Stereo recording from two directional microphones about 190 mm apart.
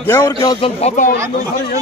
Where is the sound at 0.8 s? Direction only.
40° left (ahead or behind).